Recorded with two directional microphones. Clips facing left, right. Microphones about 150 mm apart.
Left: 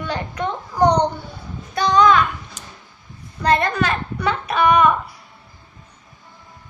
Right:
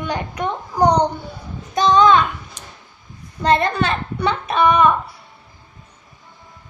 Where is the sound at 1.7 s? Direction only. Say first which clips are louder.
Right 2 dB; 20° right (ahead or behind).